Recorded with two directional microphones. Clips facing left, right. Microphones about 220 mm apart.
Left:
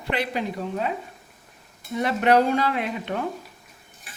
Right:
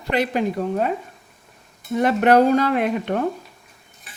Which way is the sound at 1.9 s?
50° right (ahead or behind).